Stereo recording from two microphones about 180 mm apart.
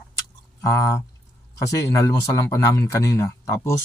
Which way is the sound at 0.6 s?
15° left (ahead or behind).